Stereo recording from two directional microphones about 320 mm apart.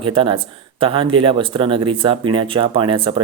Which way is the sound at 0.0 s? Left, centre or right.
Centre.